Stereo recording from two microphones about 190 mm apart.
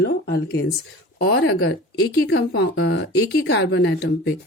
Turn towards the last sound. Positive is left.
turn(degrees=70)  # may be behind; listen again after turning